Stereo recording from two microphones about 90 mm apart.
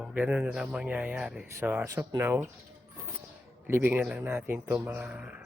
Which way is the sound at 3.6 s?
25° right (ahead or behind).